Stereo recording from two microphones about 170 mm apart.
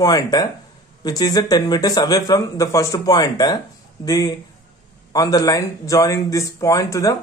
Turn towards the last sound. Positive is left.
turn(degrees=20)  # may be behind; listen again after turning